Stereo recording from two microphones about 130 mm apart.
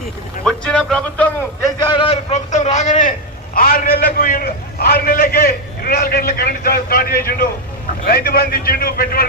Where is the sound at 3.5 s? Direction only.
90° left.